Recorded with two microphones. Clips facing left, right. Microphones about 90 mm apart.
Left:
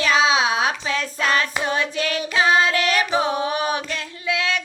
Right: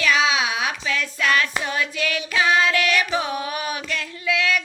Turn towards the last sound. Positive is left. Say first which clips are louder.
# right 1 dB
turn(degrees=25)  # may be behind; listen again after turning